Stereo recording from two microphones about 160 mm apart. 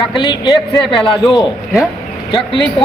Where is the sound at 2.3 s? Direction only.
30° left (ahead or behind).